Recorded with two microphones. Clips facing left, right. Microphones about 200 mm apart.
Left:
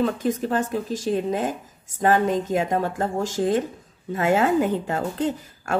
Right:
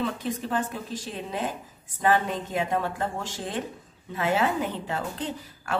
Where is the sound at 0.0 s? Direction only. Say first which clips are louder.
Left 7 dB; 45° left (ahead or behind).